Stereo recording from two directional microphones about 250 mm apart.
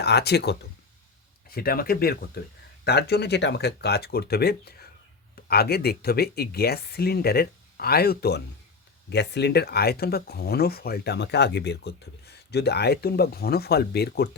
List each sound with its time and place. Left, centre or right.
0.0 s speech: left